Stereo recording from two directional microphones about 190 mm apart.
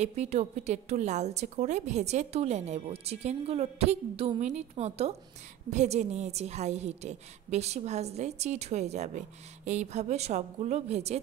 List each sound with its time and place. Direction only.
0.0 s a woman's voice: 35° right (ahead or behind)